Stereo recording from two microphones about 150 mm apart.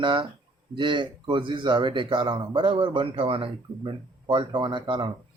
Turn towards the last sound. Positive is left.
turn(degrees=-30)  # may be behind; listen again after turning